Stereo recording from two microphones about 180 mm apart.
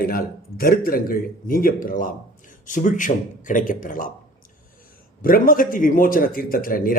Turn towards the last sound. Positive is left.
turn(degrees=50)  # may be behind; listen again after turning